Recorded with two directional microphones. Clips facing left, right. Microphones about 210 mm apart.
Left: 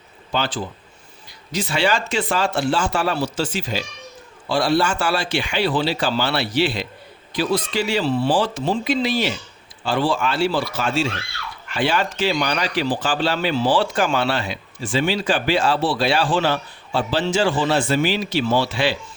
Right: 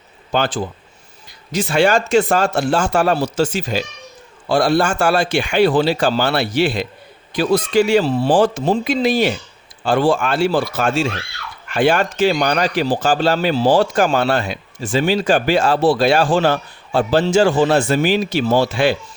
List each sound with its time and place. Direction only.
0.3 s a man's voice: 50° right (ahead or behind)